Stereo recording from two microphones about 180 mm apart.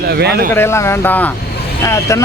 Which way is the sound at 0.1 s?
65° right (ahead or behind).